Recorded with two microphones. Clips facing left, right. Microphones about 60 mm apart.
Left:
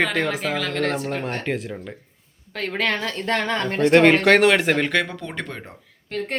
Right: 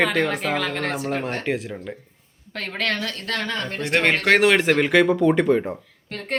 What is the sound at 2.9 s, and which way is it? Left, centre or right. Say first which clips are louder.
Speech: left 4 dB; left.